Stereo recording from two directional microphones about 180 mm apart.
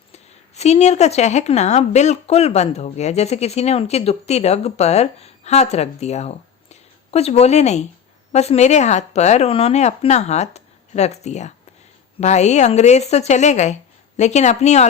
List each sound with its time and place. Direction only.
0.1 s speech: 35° left (ahead or behind)